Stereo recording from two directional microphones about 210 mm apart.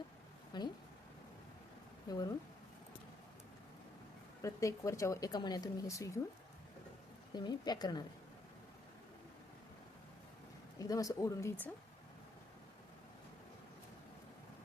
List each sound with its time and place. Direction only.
0.5 s a woman's voice: 20° left (ahead or behind)
2.0 s speech: 15° left (ahead or behind)
4.4 s speech: 15° left (ahead or behind)
7.3 s a woman's voice: 20° left (ahead or behind)
10.8 s speech: 15° left (ahead or behind)